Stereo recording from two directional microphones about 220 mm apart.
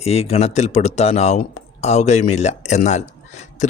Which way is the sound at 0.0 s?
30° left (ahead or behind).